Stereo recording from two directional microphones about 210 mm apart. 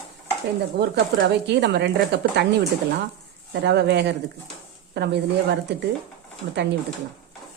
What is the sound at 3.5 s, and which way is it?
A woman's voice, 55° right (ahead or behind).